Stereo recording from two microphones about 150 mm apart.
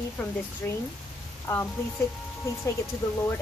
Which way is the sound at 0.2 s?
10° left (ahead or behind).